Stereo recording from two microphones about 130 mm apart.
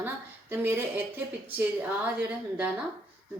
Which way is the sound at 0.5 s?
20° right (ahead or behind).